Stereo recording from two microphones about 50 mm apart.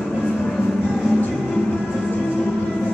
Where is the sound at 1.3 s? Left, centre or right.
Centre.